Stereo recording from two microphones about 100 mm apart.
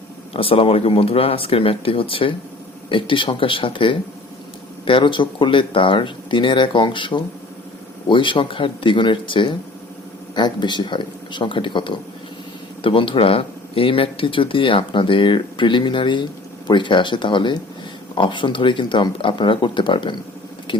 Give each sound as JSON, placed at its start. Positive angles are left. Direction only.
{"t": 0.3, "sound": "speech", "side_deg": 65}